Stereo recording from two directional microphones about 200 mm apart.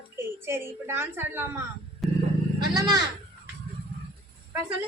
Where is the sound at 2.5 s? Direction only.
20° right (ahead or behind).